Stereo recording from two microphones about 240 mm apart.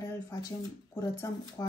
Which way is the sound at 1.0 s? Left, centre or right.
Centre.